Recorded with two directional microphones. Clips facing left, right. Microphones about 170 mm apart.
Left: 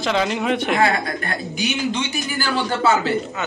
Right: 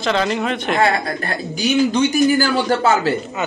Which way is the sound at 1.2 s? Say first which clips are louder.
Right 4 dB; 40° right (ahead or behind).